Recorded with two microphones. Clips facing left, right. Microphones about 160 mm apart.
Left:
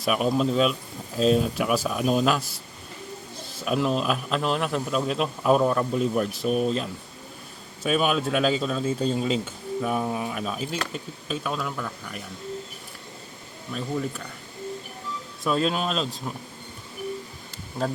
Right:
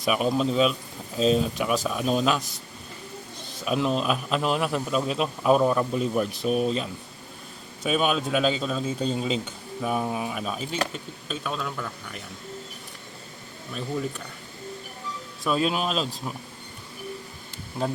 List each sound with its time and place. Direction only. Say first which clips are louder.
0.0 s a man's voice: left 1 dB; centre (ahead or behind)
15.4 s a man's voice: even; 5° right (ahead or behind)